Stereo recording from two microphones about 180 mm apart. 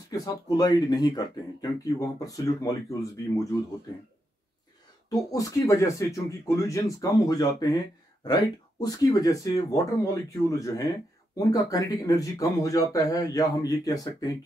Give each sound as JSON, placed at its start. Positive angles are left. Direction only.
{"t": 0.1, "sound": "speech", "side_deg": 20}
{"t": 5.1, "sound": "speech", "side_deg": 20}